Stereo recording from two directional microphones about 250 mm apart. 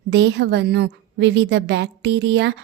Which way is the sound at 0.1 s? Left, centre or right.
Right.